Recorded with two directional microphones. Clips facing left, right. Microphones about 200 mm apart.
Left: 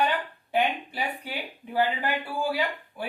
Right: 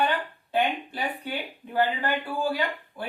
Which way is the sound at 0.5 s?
10° left (ahead or behind).